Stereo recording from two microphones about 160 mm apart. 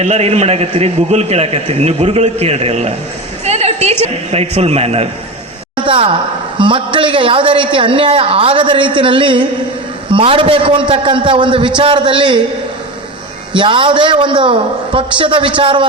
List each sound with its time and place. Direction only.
0.0 s a man's voice: 40° right (ahead or behind)
3.4 s a sound: 40° right (ahead or behind)
4.0 s a man's voice: 40° right (ahead or behind)
5.7 s a sound: 35° right (ahead or behind)
6.6 s a man's voice: 30° right (ahead or behind)
13.6 s a man's voice: 30° right (ahead or behind)